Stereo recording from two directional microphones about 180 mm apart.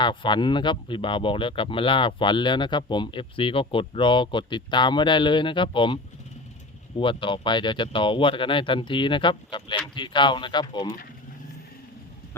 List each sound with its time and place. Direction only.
0.0 s speech: 25° left (ahead or behind)
7.0 s speech: 30° left (ahead or behind)